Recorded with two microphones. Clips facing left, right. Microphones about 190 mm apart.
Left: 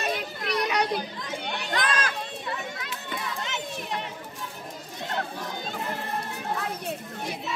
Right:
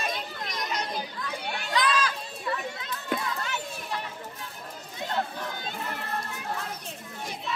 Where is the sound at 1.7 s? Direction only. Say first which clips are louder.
Right 2 dB; 50° left (ahead or behind).